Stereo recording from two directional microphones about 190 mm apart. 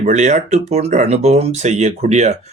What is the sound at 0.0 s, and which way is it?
Speech, 35° right (ahead or behind).